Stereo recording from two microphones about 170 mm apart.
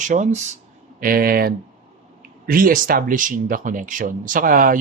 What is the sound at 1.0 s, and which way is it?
Speech, 60° right (ahead or behind).